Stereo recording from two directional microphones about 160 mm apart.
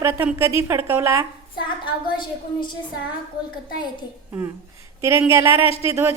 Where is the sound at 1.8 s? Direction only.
30° left (ahead or behind).